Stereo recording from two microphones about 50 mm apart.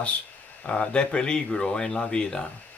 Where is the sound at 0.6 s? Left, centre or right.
Centre.